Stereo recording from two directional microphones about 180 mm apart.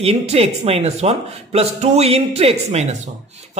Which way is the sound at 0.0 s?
35° right (ahead or behind).